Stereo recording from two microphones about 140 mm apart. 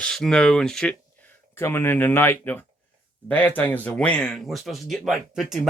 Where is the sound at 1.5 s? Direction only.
15° left (ahead or behind).